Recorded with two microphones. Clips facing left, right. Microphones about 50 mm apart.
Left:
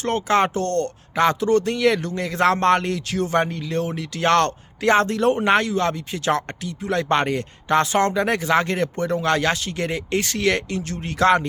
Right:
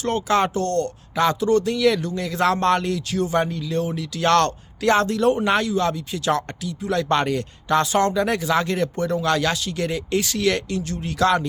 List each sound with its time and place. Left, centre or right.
0.0 s a man's voice: left
4.3 s a man's voice: left